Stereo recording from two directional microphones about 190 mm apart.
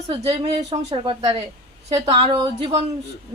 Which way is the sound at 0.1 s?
30° right (ahead or behind).